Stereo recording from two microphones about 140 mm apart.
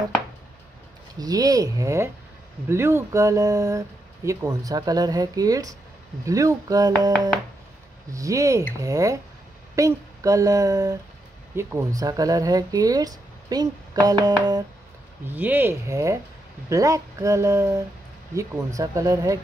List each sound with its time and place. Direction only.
1.2 s speech: 25° right (ahead or behind)
8.1 s speech: 25° right (ahead or behind)
15.2 s speech: 15° right (ahead or behind)